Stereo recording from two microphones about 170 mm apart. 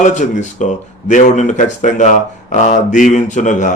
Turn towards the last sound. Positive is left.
turn(degrees=45)  # may be behind; listen again after turning